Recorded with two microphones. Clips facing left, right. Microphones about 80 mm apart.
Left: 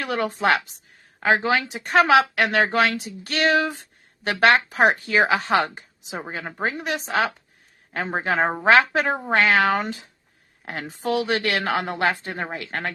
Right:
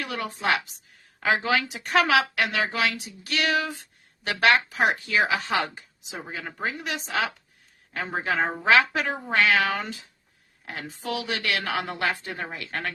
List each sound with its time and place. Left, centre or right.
0.0 s a woman's voice: left
1.2 s speech: left